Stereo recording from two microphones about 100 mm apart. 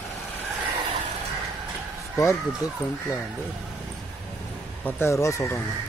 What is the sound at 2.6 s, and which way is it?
Speech, 35° left (ahead or behind).